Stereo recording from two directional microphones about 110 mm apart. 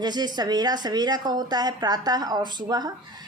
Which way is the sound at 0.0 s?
40° right (ahead or behind).